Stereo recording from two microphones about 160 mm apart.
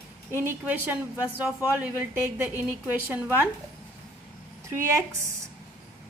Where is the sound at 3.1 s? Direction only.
10° right (ahead or behind).